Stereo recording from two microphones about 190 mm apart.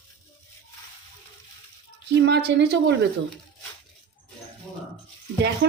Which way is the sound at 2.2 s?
60° right (ahead or behind).